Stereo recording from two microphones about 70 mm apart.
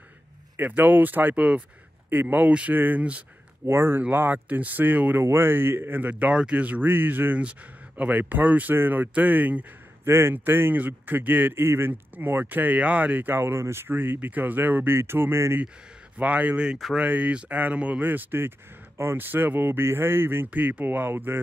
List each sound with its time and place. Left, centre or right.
0.6 s speech: right
3.6 s speech: right
10.0 s speech: right
16.2 s speech: right
20.4 s speech: right